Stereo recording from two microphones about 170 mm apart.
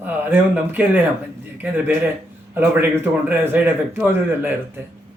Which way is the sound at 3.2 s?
10° right (ahead or behind).